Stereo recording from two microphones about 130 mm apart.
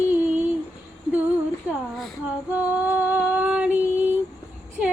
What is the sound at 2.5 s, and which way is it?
Female singing, 10° right (ahead or behind).